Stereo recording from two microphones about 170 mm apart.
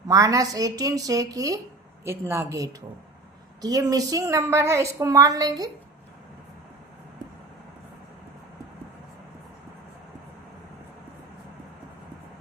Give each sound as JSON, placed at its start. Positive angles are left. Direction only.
{"t": 0.1, "sound": "a woman's voice", "side_deg": -20}